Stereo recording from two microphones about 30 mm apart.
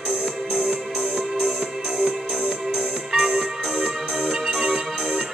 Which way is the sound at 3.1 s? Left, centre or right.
Centre.